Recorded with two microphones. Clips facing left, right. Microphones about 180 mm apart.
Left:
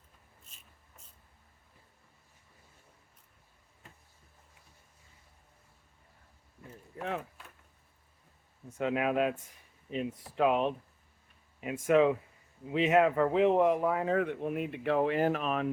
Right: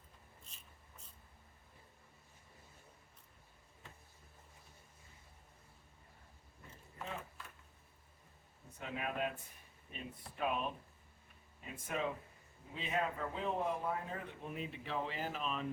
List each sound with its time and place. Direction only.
8.8 s speech: 90° left; by 15.6 s 65° left (ahead or behind)